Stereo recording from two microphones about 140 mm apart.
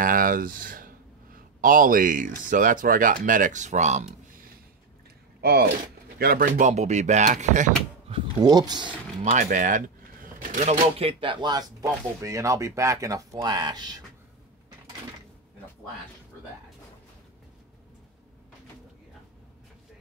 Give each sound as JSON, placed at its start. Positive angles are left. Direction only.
{"t": 0.0, "sound": "speech", "side_deg": -85}
{"t": 5.4, "sound": "speech", "side_deg": -90}
{"t": 8.4, "sound": "speech", "side_deg": -30}
{"t": 9.2, "sound": "speech", "side_deg": -60}